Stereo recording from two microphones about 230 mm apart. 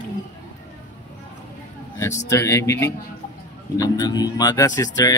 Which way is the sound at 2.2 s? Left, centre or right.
Centre.